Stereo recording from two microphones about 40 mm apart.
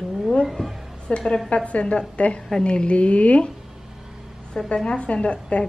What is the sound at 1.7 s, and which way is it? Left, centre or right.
Speech, left.